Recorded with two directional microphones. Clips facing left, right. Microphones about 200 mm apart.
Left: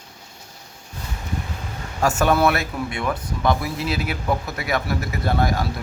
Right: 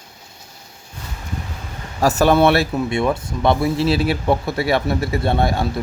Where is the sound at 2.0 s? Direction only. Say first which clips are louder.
Right 4 dB; 35° right (ahead or behind).